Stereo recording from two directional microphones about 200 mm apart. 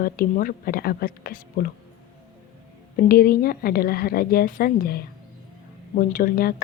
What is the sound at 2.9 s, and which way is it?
Speech, 50° left (ahead or behind).